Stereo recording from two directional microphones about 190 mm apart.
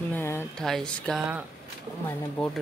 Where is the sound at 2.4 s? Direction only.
5° left (ahead or behind).